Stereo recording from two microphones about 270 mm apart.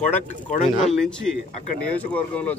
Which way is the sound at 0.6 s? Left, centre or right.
Centre.